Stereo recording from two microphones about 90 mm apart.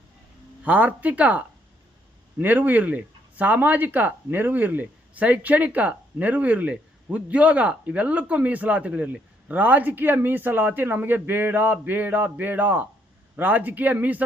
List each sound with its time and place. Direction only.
0.6 s speech: 15° right (ahead or behind)